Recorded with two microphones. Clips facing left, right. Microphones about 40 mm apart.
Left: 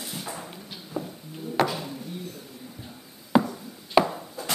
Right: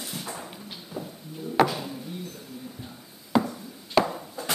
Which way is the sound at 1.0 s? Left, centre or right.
Left.